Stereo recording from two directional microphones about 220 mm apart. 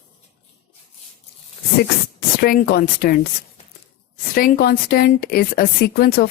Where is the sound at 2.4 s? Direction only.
45° left (ahead or behind).